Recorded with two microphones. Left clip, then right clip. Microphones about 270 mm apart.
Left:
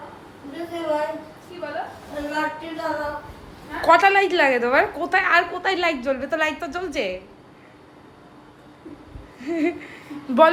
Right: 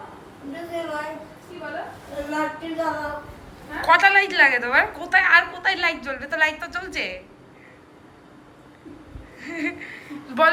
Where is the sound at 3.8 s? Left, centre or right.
Left.